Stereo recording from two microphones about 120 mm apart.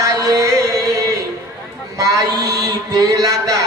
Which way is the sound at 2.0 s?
30° right (ahead or behind).